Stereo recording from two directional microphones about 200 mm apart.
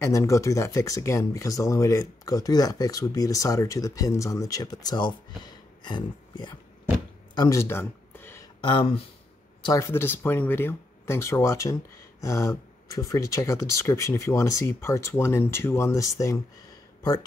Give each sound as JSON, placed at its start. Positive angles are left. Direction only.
{"t": 0.0, "sound": "speech", "side_deg": 15}
{"t": 5.4, "sound": "a sound", "side_deg": 20}
{"t": 8.5, "sound": "speech", "side_deg": 25}